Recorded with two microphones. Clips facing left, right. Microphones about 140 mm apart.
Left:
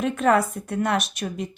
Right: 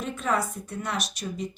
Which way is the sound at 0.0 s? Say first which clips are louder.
Left 8 dB; 65° left (ahead or behind).